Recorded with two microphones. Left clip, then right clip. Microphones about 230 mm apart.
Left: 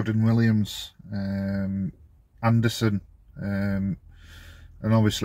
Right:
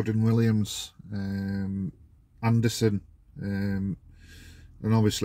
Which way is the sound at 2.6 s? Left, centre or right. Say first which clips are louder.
Even; centre.